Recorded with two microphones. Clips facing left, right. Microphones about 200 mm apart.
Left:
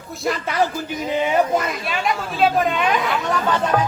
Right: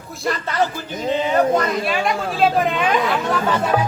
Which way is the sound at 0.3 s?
10° left (ahead or behind).